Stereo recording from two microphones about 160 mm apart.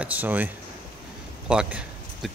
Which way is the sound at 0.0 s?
10° right (ahead or behind).